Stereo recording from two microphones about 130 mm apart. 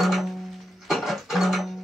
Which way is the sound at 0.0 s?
Centre (ahead or behind).